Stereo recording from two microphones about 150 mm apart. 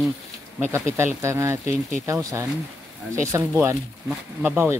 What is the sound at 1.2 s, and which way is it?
Speech, 20° right (ahead or behind).